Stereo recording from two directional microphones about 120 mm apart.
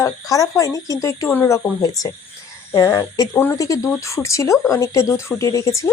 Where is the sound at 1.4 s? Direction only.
15° left (ahead or behind).